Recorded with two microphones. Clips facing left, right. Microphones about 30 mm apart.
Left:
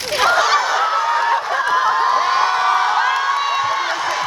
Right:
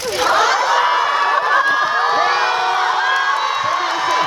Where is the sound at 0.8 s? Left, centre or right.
Right.